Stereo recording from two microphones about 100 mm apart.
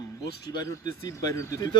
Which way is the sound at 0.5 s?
40° left (ahead or behind).